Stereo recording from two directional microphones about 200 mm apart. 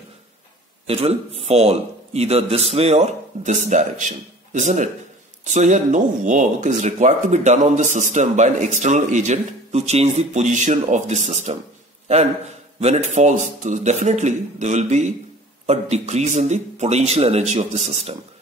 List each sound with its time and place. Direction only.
0.8 s speech: 30° right (ahead or behind)
12.8 s speech: 35° right (ahead or behind)